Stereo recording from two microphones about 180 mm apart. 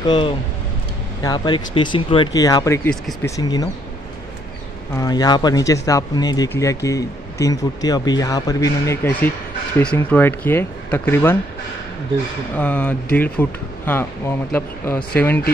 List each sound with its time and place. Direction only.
0.0 s speech: 25° left (ahead or behind)
4.9 s speech: 20° left (ahead or behind)
12.5 s speech: 10° left (ahead or behind)